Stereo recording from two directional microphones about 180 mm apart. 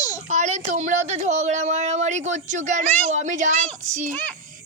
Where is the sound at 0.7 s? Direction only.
40° right (ahead or behind).